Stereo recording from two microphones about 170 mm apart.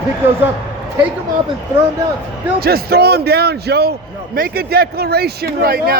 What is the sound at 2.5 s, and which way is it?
A man's voice, 65° right (ahead or behind).